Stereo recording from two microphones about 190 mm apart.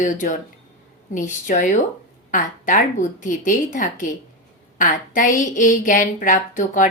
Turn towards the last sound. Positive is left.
turn(degrees=40)  # may be behind; listen again after turning